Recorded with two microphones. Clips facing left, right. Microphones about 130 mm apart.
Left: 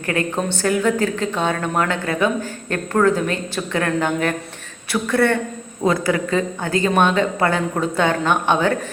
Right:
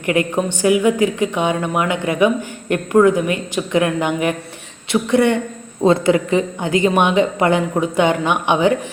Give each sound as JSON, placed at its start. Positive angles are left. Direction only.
{"t": 0.0, "sound": "speech", "side_deg": -15}